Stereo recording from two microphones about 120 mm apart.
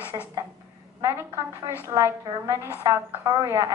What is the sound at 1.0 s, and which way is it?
A woman's voice, 20° right (ahead or behind).